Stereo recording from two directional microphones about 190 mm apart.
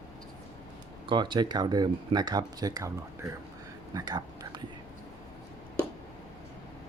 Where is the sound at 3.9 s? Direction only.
20° right (ahead or behind).